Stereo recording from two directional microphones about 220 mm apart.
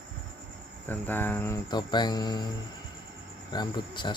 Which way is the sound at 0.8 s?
10° left (ahead or behind).